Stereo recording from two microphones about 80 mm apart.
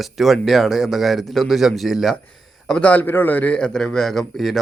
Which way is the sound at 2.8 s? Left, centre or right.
Left.